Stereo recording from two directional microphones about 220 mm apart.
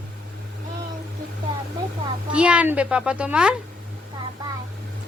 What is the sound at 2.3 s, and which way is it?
Speech, 5° right (ahead or behind).